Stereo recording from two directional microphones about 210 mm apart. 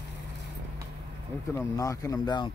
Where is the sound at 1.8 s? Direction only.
15° left (ahead or behind).